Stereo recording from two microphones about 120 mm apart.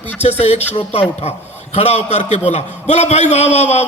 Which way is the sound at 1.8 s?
60° left (ahead or behind).